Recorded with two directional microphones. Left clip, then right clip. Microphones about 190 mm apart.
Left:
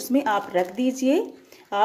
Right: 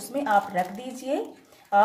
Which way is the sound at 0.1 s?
50° left (ahead or behind).